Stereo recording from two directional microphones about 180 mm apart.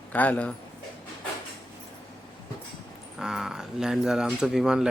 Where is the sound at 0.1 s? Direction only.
10° left (ahead or behind).